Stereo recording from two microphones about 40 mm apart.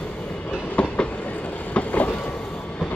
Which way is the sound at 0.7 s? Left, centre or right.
Left.